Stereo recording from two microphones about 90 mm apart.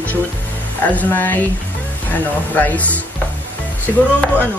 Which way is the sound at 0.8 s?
20° left (ahead or behind).